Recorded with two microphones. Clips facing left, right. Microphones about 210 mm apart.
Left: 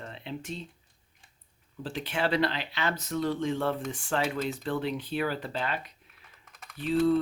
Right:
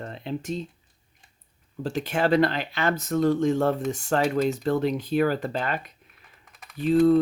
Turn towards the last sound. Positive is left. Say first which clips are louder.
# right 6 dB
turn(degrees=-45)  # may be behind; listen again after turning